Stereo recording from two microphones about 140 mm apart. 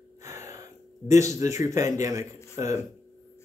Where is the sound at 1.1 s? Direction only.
20° right (ahead or behind).